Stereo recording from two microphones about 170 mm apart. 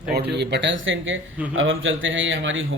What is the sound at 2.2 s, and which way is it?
Speech, 90° right.